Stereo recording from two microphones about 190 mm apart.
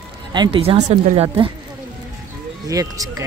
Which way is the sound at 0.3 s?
25° right (ahead or behind).